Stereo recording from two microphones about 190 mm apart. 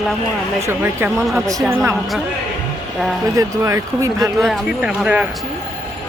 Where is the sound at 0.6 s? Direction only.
10° right (ahead or behind).